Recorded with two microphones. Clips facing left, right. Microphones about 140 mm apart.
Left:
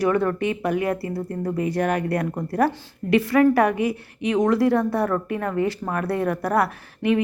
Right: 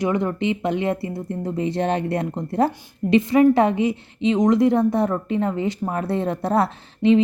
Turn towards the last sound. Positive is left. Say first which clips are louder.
# right 5 dB
turn(degrees=-25)  # may be behind; listen again after turning